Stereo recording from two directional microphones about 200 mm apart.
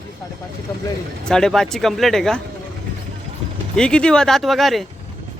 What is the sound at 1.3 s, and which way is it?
Speech, 5° left (ahead or behind).